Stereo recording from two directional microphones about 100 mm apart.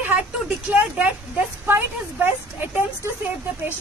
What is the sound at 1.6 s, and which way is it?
Speech, 20° right (ahead or behind).